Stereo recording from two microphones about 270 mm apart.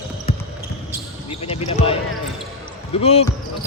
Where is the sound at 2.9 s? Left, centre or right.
Left.